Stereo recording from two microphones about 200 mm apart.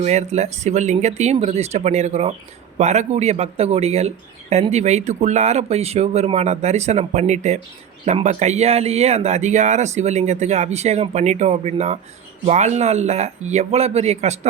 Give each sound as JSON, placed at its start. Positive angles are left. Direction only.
{"t": 0.0, "sound": "speech", "side_deg": -35}